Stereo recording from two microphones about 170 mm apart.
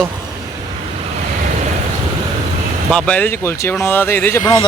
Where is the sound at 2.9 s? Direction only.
5° left (ahead or behind); by 4.7 s 20° left (ahead or behind).